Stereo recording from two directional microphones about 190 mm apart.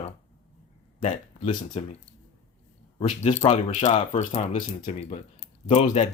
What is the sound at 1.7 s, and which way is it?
Speech, 35° left (ahead or behind).